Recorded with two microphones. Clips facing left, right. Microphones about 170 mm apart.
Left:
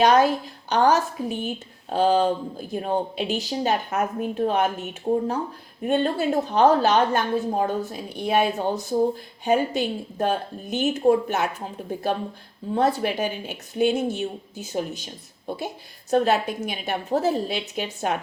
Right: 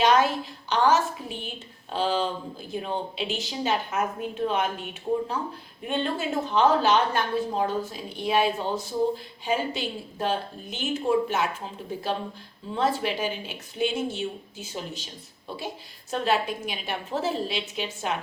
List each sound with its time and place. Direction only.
0.0 s a woman's voice: 40° left (ahead or behind)